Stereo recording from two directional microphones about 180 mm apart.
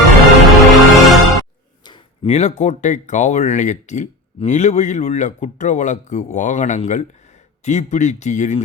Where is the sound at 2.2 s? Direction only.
40° left (ahead or behind).